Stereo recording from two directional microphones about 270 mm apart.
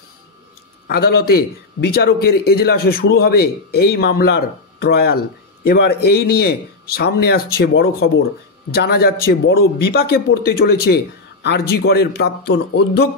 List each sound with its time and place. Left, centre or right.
0.8 s a man's voice: left